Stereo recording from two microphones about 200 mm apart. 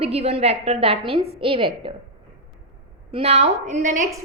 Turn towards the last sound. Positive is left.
turn(degrees=-40)  # may be behind; listen again after turning